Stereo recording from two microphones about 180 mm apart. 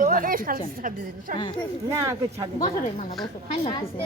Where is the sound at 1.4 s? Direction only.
25° left (ahead or behind).